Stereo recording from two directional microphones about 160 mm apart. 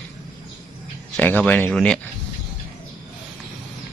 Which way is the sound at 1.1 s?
10° left (ahead or behind).